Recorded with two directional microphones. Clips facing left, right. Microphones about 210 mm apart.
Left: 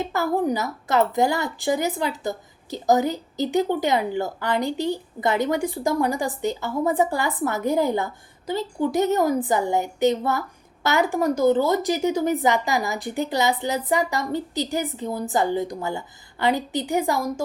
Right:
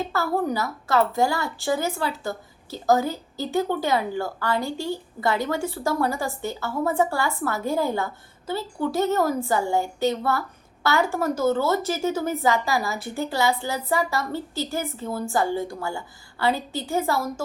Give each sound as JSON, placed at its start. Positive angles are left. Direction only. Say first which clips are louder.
{"t": 0.0, "sound": "a woman's voice", "louder": "left 2 dB", "side_deg": 15}